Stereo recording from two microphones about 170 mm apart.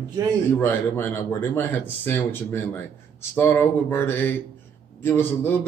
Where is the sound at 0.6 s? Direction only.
10° left (ahead or behind).